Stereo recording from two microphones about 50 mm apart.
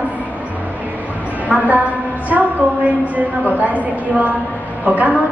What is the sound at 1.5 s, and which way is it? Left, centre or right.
A woman's voice, right.